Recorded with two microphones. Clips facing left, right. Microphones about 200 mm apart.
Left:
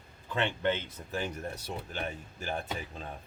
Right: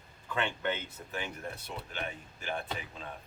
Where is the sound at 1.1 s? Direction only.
40° left (ahead or behind).